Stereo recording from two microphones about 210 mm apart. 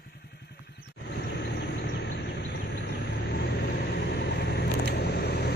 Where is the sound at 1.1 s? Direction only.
55° left (ahead or behind).